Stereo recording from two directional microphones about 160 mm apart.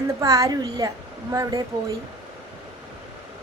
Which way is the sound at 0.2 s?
20° right (ahead or behind).